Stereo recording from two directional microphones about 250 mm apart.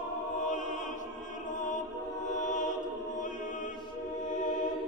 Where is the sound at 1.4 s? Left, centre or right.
Left.